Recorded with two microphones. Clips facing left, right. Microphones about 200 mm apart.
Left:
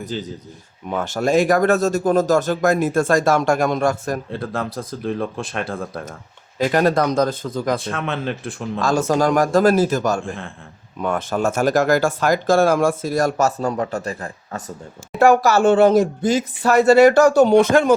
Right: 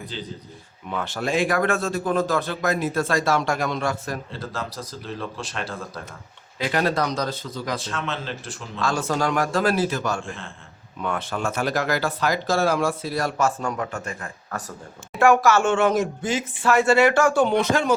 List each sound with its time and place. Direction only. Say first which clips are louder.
0.0 s speech: left 6 dB; 45° left (ahead or behind)
11.0 s speech: left 6 dB; 45° left (ahead or behind)